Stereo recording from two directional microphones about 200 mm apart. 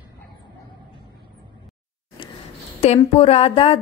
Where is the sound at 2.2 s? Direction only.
25° left (ahead or behind).